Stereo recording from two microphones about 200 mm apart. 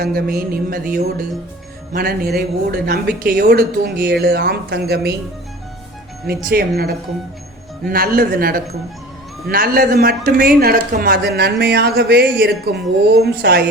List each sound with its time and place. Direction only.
0.0 s speech: 50° right (ahead or behind)
1.9 s speech: 50° right (ahead or behind)
6.2 s speech: 50° right (ahead or behind)